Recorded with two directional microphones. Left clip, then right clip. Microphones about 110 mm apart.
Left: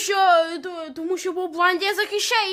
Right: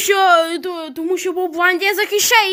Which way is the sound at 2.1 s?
30° right (ahead or behind).